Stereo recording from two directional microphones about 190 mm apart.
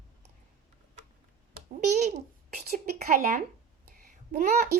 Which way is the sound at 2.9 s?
45° right (ahead or behind).